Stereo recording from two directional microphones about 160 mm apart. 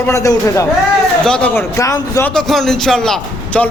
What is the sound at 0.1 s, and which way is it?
Speech, 20° left (ahead or behind).